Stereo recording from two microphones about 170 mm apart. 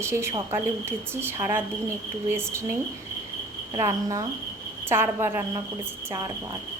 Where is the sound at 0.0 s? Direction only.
15° right (ahead or behind).